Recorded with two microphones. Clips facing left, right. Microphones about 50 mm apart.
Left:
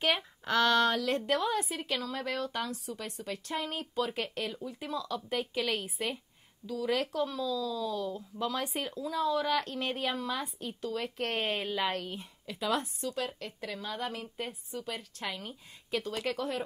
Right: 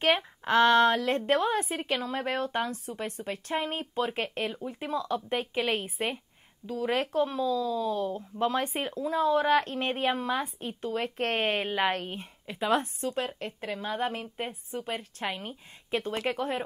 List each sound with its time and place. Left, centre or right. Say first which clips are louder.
0.0 s speech: right 5 dB; right